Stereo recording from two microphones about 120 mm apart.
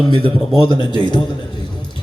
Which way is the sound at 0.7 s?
40° left (ahead or behind).